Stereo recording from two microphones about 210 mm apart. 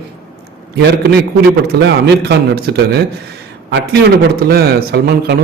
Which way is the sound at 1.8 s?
55° right (ahead or behind).